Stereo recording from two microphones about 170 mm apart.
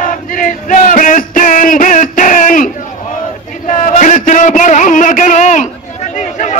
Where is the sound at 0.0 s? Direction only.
50° left (ahead or behind).